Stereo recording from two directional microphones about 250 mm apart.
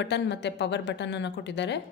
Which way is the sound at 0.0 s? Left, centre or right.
Left.